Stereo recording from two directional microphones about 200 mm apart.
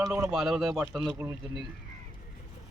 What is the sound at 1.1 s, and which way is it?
Speech, 15° right (ahead or behind).